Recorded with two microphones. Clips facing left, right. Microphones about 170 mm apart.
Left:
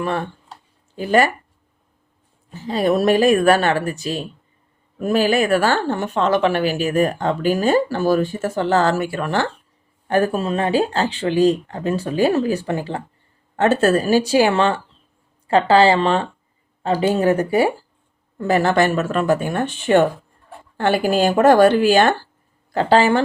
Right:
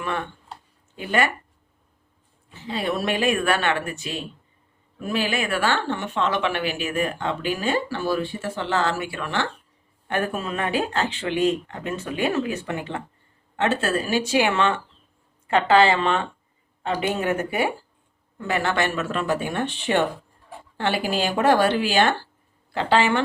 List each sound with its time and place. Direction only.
0.0 s speech: 35° left (ahead or behind)
2.5 s speech: 40° left (ahead or behind)